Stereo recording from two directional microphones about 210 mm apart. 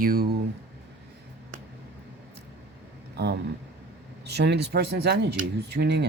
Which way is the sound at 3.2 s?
50° right (ahead or behind).